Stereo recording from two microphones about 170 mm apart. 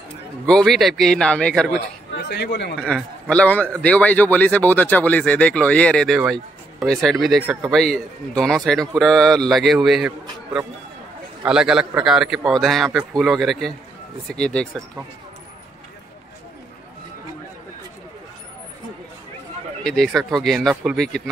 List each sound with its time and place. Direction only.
0.5 s a man's voice: 5° left (ahead or behind)
2.2 s speech: 75° left (ahead or behind)
2.8 s a man's voice: 5° left (ahead or behind)
11.4 s a man's voice: 5° right (ahead or behind)
19.8 s a man's voice: centre (ahead or behind)